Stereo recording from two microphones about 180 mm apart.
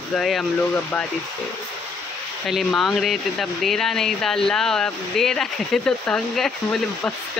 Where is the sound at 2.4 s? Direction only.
Centre (ahead or behind).